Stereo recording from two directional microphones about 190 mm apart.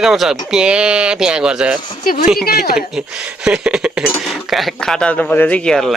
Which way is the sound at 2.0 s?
45° left (ahead or behind).